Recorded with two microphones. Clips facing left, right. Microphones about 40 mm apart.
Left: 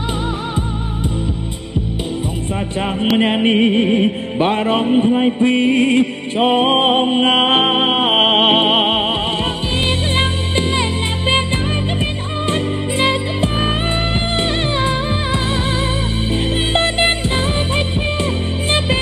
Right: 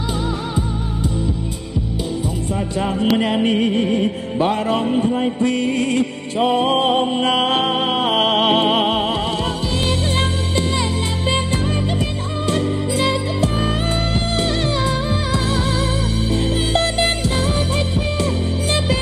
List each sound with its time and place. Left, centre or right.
3.2 s music: left
11.2 s music: left
14.9 s music: left